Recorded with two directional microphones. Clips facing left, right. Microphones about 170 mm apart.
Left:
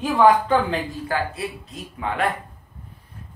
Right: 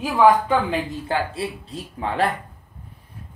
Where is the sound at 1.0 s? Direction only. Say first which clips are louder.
Right 1 dB; 30° right (ahead or behind).